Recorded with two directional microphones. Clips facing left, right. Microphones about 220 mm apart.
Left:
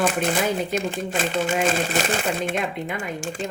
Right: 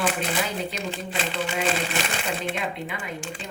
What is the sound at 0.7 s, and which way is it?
Speech, 50° left (ahead or behind).